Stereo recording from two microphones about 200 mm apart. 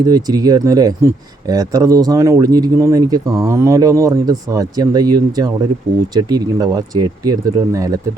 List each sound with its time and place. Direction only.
0.0 s speech: 20° right (ahead or behind)